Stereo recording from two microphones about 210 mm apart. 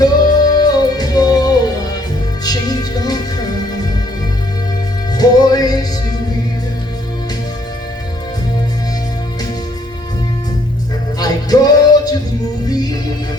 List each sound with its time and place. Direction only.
0.0 s music: 20° left (ahead or behind)
5.1 s music: 20° left (ahead or behind)
11.2 s music: 20° left (ahead or behind)